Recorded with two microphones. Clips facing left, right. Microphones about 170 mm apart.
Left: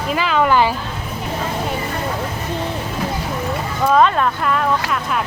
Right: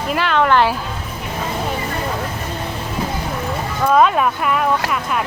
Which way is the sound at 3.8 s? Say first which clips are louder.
Even; 5° right (ahead or behind).